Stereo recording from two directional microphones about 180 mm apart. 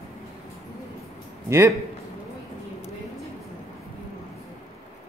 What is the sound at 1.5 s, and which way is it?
Speech, 15° right (ahead or behind).